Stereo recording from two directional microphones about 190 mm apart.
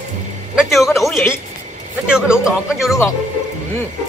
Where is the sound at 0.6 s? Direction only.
Centre (ahead or behind).